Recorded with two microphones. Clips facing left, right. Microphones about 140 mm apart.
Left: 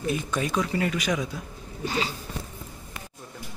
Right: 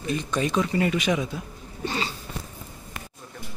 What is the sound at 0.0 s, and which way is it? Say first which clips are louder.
Speech: right 1 dB; 5° left (ahead or behind).